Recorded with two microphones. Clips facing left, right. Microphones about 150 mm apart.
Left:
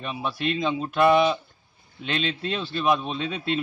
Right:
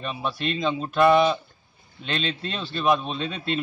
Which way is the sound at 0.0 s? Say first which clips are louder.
Even; 5° left (ahead or behind).